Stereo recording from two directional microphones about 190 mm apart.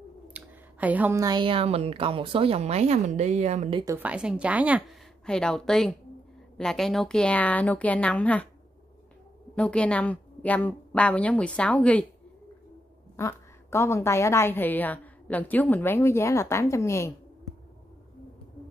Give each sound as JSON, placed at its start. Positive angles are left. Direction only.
{"t": 0.3, "sound": "a woman's voice", "side_deg": -10}
{"t": 3.8, "sound": "a woman's voice", "side_deg": -10}
{"t": 5.2, "sound": "a woman's voice", "side_deg": 5}
{"t": 9.6, "sound": "a woman's voice", "side_deg": 5}
{"t": 13.1, "sound": "a woman's voice", "side_deg": 15}